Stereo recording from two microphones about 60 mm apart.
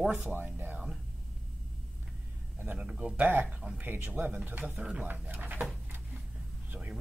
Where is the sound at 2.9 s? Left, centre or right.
Centre.